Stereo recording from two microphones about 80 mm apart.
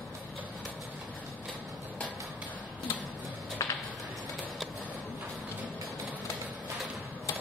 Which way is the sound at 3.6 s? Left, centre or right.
Left.